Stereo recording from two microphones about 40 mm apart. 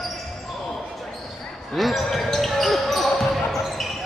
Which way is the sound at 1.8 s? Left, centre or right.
Centre.